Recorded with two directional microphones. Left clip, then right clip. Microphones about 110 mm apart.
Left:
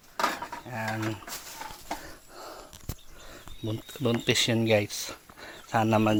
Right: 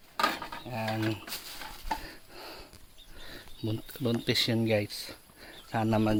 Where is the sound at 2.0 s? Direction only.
75° right (ahead or behind).